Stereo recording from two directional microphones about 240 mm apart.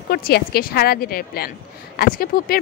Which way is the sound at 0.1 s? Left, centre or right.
Left.